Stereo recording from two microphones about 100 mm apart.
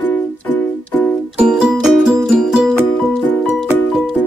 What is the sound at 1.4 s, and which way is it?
Music, 10° right (ahead or behind).